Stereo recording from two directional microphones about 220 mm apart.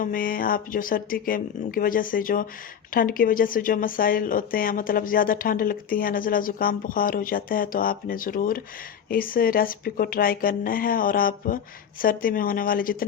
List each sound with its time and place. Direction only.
0.0 s a woman's voice: 40° left (ahead or behind)